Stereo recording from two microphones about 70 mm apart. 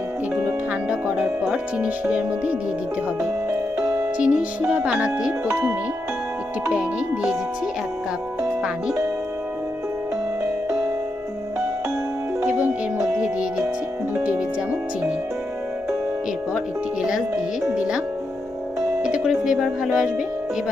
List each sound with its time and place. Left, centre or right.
0.9 s speech: centre
3.2 s music: right
4.2 s speech: centre
6.7 s speech: centre
13.1 s music: centre
17.0 s music: centre
19.0 s music: centre